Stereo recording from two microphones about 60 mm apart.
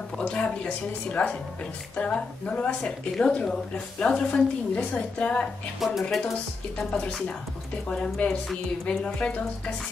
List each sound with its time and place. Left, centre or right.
0.2 s a woman's voice: centre
5.8 s speech: centre
6.8 s a woman's voice: centre